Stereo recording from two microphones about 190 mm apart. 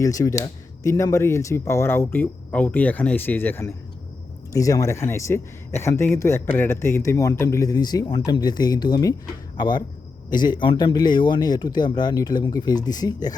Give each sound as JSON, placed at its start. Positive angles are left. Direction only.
{"t": 0.0, "sound": "a man's voice", "side_deg": 15}